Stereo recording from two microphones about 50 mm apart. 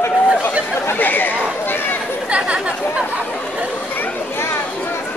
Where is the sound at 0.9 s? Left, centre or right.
Left.